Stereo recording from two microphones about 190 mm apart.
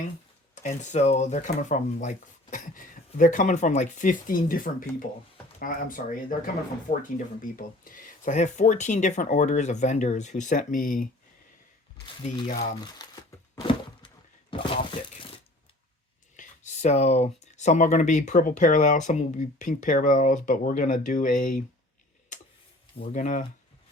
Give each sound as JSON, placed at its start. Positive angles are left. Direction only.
{"t": 0.5, "sound": "speech", "side_deg": 40}
{"t": 12.0, "sound": "speech", "side_deg": 25}
{"t": 13.0, "sound": "a sound", "side_deg": 20}
{"t": 14.5, "sound": "crumpling", "side_deg": 25}
{"t": 16.4, "sound": "speech", "side_deg": 40}
{"t": 23.1, "sound": "speech", "side_deg": 45}